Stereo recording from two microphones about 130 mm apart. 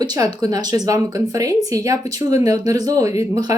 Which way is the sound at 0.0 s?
30° right (ahead or behind).